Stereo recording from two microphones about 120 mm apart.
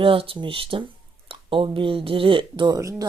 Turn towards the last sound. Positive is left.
turn(degrees=-25)  # may be behind; listen again after turning